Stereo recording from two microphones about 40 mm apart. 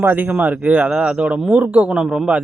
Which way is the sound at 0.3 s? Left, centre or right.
Right.